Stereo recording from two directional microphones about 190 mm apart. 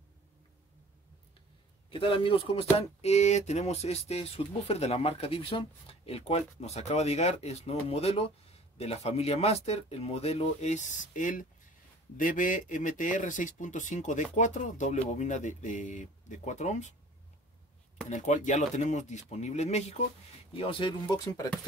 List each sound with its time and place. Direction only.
1.9 s speech: 30° left (ahead or behind)
18.1 s speech: 40° left (ahead or behind); by 21.5 s 20° left (ahead or behind)